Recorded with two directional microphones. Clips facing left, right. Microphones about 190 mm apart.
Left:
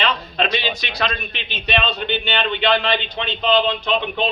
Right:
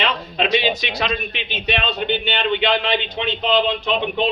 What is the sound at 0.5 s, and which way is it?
A man's voice, 20° right (ahead or behind).